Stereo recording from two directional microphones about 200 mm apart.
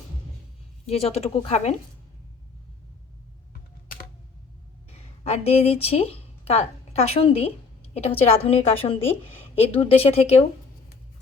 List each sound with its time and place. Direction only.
0.9 s speech: 30° left (ahead or behind)
5.2 s a woman's voice: 30° left (ahead or behind)